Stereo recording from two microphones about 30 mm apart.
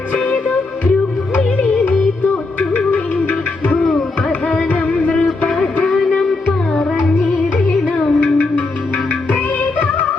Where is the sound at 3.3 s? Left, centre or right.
Left.